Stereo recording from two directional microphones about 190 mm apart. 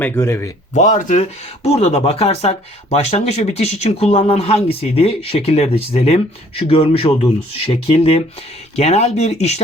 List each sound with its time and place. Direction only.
0.0 s speech: 15° left (ahead or behind)
0.7 s speech: 40° left (ahead or behind)